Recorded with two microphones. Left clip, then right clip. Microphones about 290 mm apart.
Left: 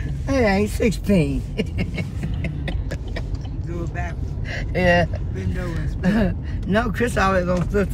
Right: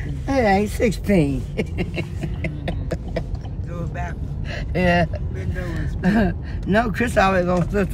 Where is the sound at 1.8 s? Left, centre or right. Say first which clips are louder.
Right 2 dB; centre.